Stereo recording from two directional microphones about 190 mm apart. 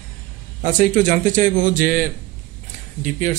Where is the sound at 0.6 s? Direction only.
40° right (ahead or behind).